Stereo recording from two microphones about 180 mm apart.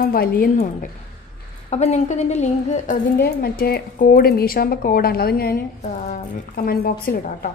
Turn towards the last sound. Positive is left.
turn(degrees=60)  # may be behind; listen again after turning